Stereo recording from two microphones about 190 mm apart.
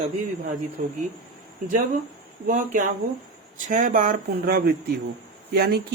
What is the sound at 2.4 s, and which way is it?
Speech, 45° right (ahead or behind).